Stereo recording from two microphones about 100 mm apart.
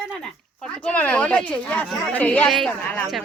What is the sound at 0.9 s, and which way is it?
A woman's voice, 15° left (ahead or behind).